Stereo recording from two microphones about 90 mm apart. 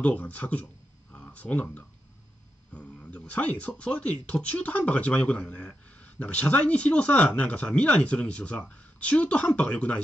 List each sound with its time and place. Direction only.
0.0 s speech: 15° left (ahead or behind)